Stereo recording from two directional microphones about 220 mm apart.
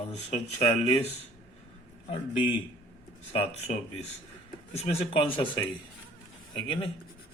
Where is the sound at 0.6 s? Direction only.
30° left (ahead or behind).